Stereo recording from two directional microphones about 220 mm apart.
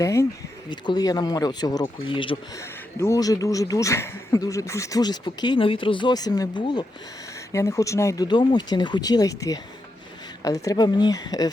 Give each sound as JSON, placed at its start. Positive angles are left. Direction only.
{"t": 0.0, "sound": "speech", "side_deg": 15}